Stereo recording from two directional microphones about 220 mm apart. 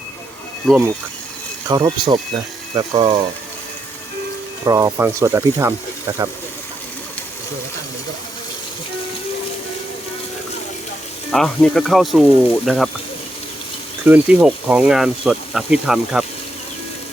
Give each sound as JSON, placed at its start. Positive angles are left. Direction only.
{"t": 0.7, "sound": "speech", "side_deg": 0}
{"t": 1.6, "sound": "speech", "side_deg": -20}
{"t": 4.6, "sound": "speech", "side_deg": -15}
{"t": 11.3, "sound": "speech", "side_deg": 5}
{"t": 14.0, "sound": "speech", "side_deg": -5}